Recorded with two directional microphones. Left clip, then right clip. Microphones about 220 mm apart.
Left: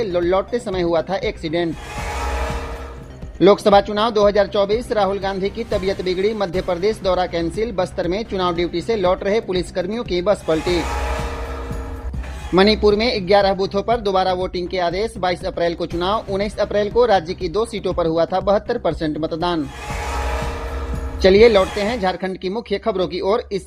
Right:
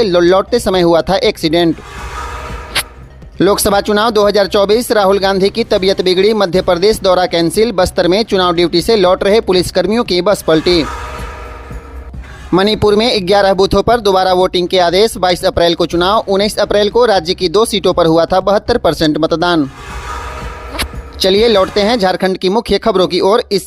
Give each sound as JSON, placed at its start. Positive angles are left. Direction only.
{"t": 0.0, "sound": "speech", "side_deg": -30}
{"t": 3.3, "sound": "speech", "side_deg": -30}
{"t": 12.5, "sound": "speech", "side_deg": -30}
{"t": 21.2, "sound": "speech", "side_deg": -25}